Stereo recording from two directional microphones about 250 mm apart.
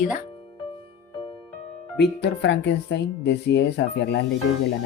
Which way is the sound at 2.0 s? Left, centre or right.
Left.